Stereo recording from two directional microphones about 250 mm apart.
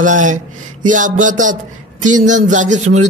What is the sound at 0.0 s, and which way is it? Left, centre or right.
A man's voice, right.